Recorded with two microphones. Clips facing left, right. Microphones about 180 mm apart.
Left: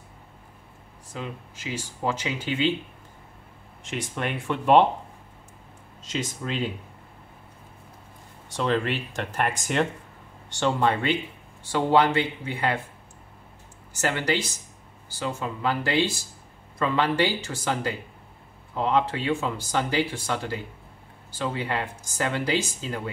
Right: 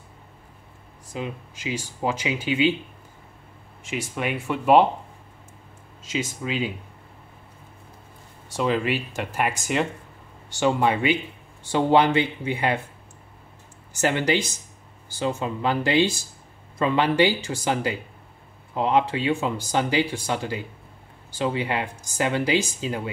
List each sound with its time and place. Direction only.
1.1 s speech: 15° right (ahead or behind)
3.8 s speech: 5° right (ahead or behind)
6.0 s speech: 5° right (ahead or behind)
8.5 s speech: 10° right (ahead or behind)
14.0 s speech: 15° right (ahead or behind)